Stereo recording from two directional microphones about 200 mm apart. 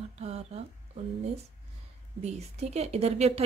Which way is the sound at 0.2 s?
30° right (ahead or behind).